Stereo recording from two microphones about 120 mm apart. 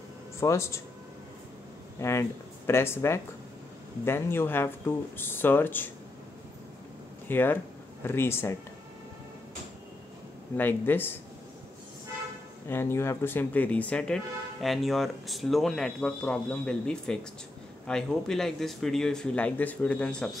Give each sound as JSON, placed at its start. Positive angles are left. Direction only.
{"t": 0.4, "sound": "speech", "side_deg": 25}
{"t": 2.0, "sound": "speech", "side_deg": 25}
{"t": 7.2, "sound": "speech", "side_deg": 15}
{"t": 10.6, "sound": "speech", "side_deg": 15}
{"t": 12.6, "sound": "speech", "side_deg": 20}